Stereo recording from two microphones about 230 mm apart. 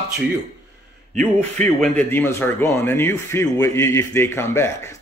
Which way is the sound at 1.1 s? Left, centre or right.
Centre.